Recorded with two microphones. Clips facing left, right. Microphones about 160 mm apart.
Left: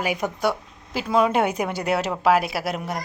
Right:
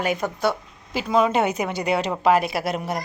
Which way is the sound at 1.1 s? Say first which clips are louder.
Even; 10° left (ahead or behind).